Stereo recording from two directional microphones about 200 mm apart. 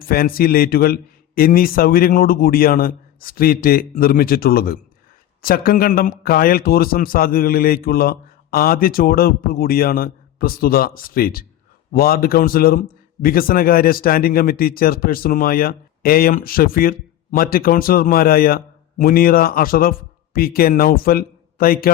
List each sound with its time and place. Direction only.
0.0 s speech: 45° left (ahead or behind)